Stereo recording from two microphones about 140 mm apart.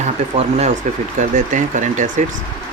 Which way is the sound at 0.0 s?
50° right (ahead or behind).